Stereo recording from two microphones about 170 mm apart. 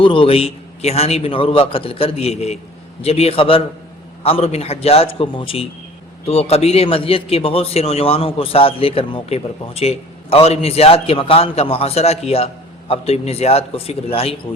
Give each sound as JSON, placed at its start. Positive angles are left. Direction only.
{"t": 0.0, "sound": "a man's voice", "side_deg": 30}